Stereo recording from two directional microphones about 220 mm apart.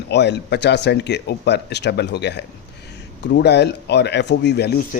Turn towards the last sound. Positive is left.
turn(degrees=50)  # may be behind; listen again after turning